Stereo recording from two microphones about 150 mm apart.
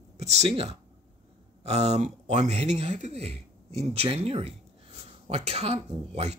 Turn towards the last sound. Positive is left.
turn(degrees=-45)  # may be behind; listen again after turning